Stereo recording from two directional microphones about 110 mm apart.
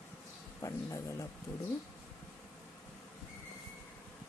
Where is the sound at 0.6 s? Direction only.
30° left (ahead or behind).